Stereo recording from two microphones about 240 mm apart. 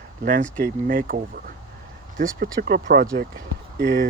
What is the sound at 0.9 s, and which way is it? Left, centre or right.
Speech, right.